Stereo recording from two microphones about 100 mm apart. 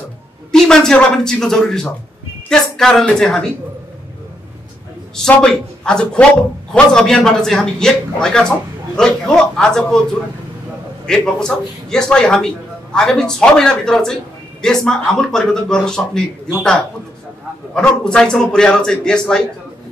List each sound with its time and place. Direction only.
0.5 s a woman's voice: 5° left (ahead or behind)
5.3 s a man's voice: 10° left (ahead or behind)
11.1 s a man's voice: 5° left (ahead or behind)
17.7 s a man's voice: 10° left (ahead or behind)